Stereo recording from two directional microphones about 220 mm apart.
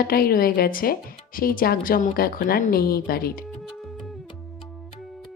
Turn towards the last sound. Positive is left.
turn(degrees=40)  # may be behind; listen again after turning